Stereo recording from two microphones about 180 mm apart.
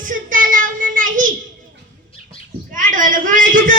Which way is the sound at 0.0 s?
50° right (ahead or behind).